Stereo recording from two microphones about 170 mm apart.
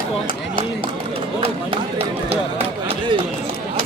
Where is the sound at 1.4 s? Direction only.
35° right (ahead or behind).